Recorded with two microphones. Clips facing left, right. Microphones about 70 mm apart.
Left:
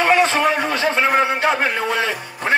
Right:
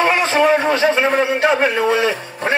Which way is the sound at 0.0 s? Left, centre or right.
Right.